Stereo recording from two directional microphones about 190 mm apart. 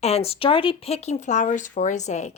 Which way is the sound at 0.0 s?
35° left (ahead or behind).